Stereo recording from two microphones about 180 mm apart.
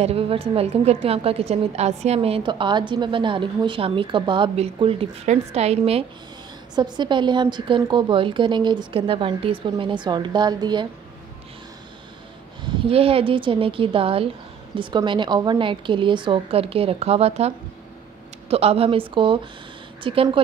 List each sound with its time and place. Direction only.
0.0 s a woman's voice: 35° right (ahead or behind)
6.7 s a woman's voice: 25° right (ahead or behind)
12.8 s a woman's voice: 30° right (ahead or behind)
18.5 s a woman's voice: 35° right (ahead or behind)